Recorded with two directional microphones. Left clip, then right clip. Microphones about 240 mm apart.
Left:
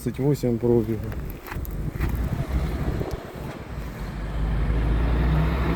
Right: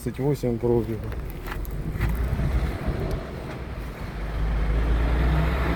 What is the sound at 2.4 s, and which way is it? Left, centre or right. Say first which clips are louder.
Vehicle: even; left.